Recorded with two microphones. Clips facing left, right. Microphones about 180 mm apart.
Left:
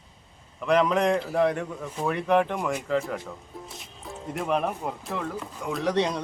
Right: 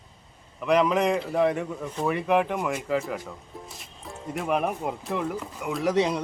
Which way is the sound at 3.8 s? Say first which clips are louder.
Left 1 dB; centre (ahead or behind).